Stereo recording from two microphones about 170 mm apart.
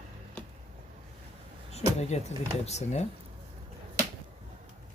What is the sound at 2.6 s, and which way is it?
Speech, 40° left (ahead or behind).